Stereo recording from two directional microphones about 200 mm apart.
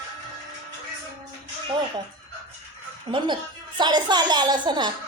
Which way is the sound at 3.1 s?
25° right (ahead or behind).